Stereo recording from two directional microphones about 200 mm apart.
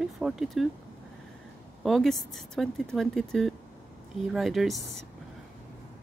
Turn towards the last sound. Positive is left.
turn(degrees=0)  # may be behind; listen again after turning